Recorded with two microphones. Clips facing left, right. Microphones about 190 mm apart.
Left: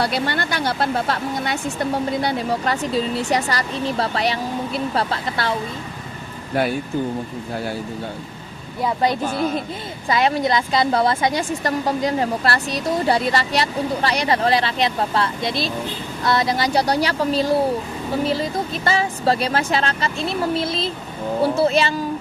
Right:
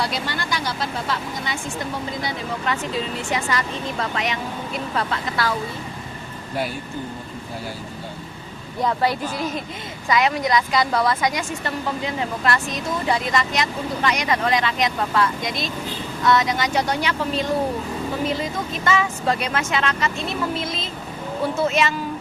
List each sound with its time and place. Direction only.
0.0 s speech: 60° left (ahead or behind)
2.5 s a woman's voice: 35° left (ahead or behind)
9.2 s speech: 55° left (ahead or behind)
10.1 s a woman's voice: 30° left (ahead or behind)